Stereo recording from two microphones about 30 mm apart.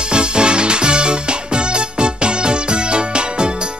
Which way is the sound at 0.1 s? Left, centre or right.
Right.